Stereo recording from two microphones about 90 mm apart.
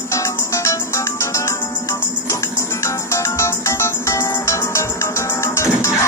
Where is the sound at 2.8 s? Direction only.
35° left (ahead or behind).